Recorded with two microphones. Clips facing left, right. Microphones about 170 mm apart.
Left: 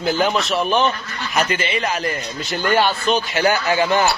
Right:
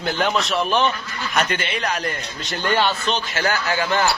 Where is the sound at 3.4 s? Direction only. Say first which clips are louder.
Left 5 dB; 15° left (ahead or behind).